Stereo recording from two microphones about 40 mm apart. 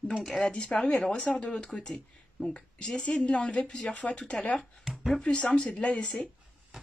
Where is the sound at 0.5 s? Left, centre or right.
Left.